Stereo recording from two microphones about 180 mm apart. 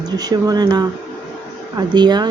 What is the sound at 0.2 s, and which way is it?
Speech, 20° right (ahead or behind).